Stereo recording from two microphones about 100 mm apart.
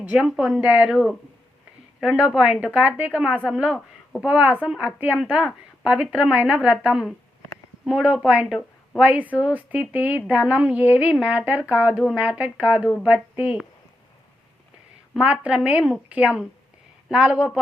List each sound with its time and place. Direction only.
0.2 s a woman's voice: 5° right (ahead or behind)
15.1 s a woman's voice: 10° right (ahead or behind)